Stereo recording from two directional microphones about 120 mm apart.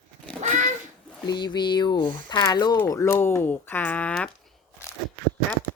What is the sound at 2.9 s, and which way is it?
Speech, 20° left (ahead or behind).